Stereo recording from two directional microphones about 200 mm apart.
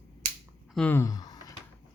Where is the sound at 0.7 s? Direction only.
10° left (ahead or behind).